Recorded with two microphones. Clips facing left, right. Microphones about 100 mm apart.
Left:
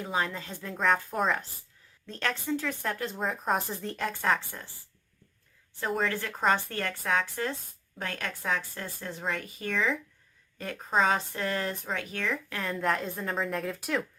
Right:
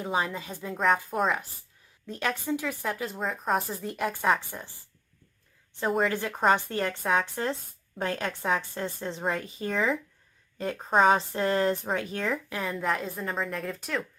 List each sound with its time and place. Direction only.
0.0 s speech: 15° right (ahead or behind)
0.7 s a woman's voice: centre (ahead or behind)
6.1 s a woman's voice: 20° right (ahead or behind)
12.5 s a woman's voice: 5° right (ahead or behind)